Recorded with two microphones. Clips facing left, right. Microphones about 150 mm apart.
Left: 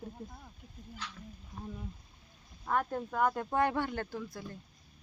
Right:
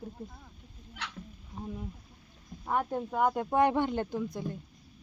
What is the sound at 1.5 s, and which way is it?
Speech, 20° right (ahead or behind).